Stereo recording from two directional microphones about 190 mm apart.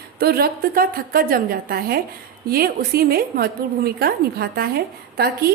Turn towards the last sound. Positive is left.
turn(degrees=-55)  # may be behind; listen again after turning